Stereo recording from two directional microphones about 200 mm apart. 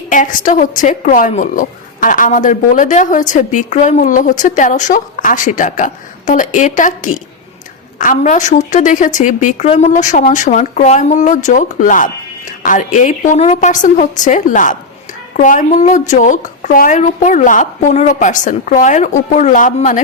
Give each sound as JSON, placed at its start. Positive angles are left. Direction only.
{"t": 0.1, "sound": "a woman's voice", "side_deg": 40}